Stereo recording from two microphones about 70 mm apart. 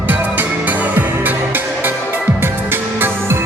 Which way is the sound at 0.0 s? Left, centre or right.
Right.